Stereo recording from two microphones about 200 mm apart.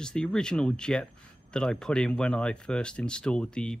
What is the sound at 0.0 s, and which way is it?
Speech, 5° left (ahead or behind).